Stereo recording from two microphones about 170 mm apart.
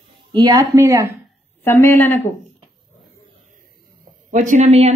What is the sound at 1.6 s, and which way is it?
Speech, 15° left (ahead or behind).